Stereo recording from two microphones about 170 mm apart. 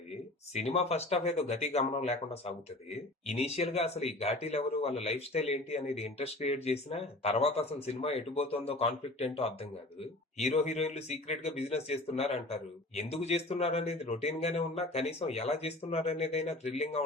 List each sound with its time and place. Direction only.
0.5 s speech: 40° left (ahead or behind)